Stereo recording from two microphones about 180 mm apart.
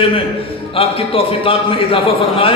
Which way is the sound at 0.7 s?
30° left (ahead or behind).